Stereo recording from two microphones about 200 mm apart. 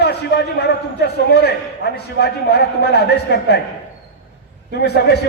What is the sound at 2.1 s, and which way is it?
A man's voice, 55° left (ahead or behind).